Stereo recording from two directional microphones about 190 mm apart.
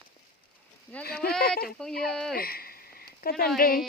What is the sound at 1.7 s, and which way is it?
Speech, 5° left (ahead or behind).